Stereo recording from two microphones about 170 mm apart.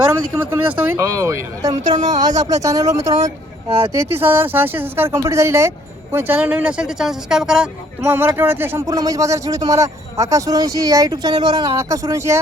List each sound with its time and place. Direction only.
0.1 s speech: 15° right (ahead or behind)
3.7 s speech: 35° right (ahead or behind)
3.9 s speech: 15° right (ahead or behind)